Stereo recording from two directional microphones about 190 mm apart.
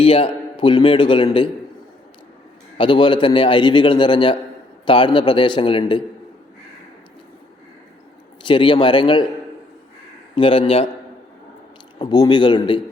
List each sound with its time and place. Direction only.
0.0 s a man's voice: 30° left (ahead or behind)
2.7 s a man's voice: 25° left (ahead or behind)
8.4 s a man's voice: 25° left (ahead or behind)
10.3 s a man's voice: 25° left (ahead or behind)
11.9 s a man's voice: 20° left (ahead or behind)